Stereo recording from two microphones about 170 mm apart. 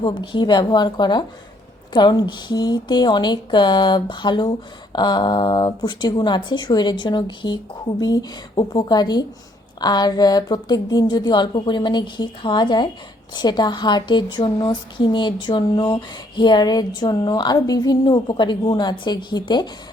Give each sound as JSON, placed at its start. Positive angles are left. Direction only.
{"t": 0.0, "sound": "speech", "side_deg": 25}